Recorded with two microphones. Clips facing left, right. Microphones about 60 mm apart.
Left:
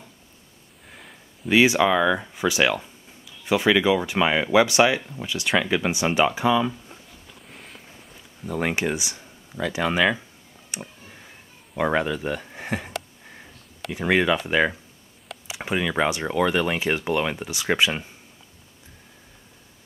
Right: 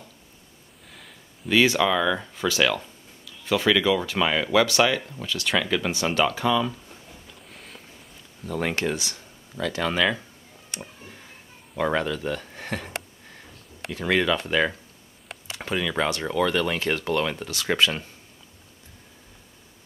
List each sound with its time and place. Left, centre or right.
0.8 s a sound: centre
1.5 s speech: centre
7.4 s a sound: centre
8.5 s speech: centre
10.7 s tick: centre
11.7 s speech: centre